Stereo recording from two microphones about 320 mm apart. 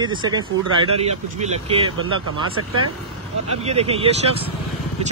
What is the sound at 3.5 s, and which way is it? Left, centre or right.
Speech, centre.